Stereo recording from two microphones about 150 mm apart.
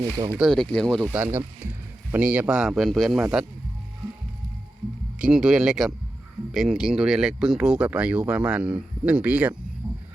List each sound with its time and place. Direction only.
0.0 s speech: 25° right (ahead or behind)
0.3 s speech: centre (ahead or behind)
1.0 s speech: 15° right (ahead or behind)
5.2 s speech: 5° right (ahead or behind)